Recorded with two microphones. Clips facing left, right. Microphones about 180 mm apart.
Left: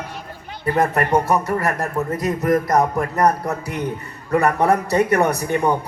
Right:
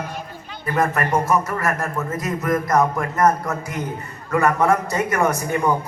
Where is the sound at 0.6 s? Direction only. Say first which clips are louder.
Left 2 dB; 35° left (ahead or behind).